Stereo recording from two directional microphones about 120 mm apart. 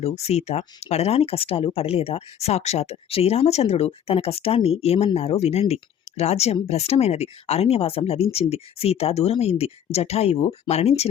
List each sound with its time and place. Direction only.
0.0 s speech: 60° left (ahead or behind)